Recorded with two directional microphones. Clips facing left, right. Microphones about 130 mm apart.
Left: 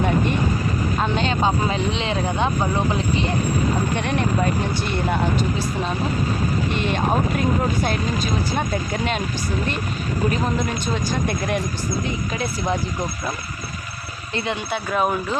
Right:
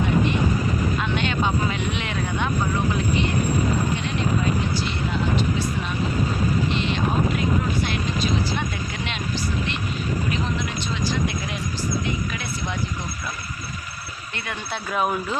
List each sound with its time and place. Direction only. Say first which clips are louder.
0.9 s speech: left 3 dB; 35° left (ahead or behind)
3.9 s speech: left 3 dB; 60° left (ahead or behind)
6.7 s speech: left 2 dB; 50° left (ahead or behind)
10.3 s speech: left 4 dB; 45° left (ahead or behind)
12.3 s speech: left 6 dB; 40° left (ahead or behind)
14.3 s speech: left 8 dB; 25° left (ahead or behind)
14.7 s speech: left 1 dB; 5° left (ahead or behind)